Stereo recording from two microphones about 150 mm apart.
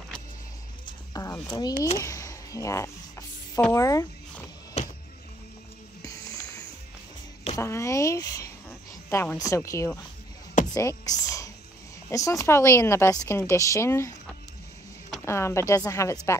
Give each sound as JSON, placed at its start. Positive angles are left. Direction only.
{"t": 0.8, "sound": "speech", "side_deg": 25}
{"t": 2.0, "sound": "a sound", "side_deg": 20}
{"t": 4.8, "sound": "music", "side_deg": 45}
{"t": 6.0, "sound": "music", "side_deg": 20}
{"t": 7.5, "sound": "speech", "side_deg": 20}
{"t": 10.7, "sound": "a sound", "side_deg": 20}
{"t": 12.1, "sound": "speech", "side_deg": 20}